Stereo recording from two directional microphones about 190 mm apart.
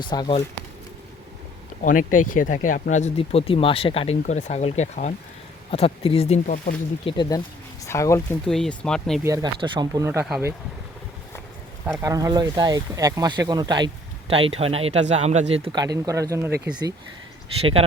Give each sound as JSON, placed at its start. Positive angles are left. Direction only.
{"t": 0.0, "sound": "speech", "side_deg": 25}
{"t": 1.8, "sound": "speech", "side_deg": 45}
{"t": 8.4, "sound": "speech", "side_deg": 0}
{"t": 9.2, "sound": "speech", "side_deg": -20}
{"t": 11.9, "sound": "speech", "side_deg": -15}
{"t": 17.6, "sound": "speech", "side_deg": -30}